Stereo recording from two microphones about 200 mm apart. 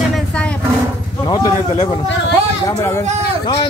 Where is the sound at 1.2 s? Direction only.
20° left (ahead or behind).